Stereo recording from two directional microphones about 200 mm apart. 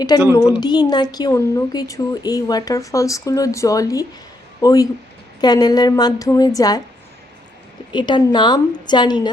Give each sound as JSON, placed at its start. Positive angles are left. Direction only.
{"t": 0.1, "sound": "a woman's voice", "side_deg": 20}
{"t": 7.9, "sound": "a woman's voice", "side_deg": 20}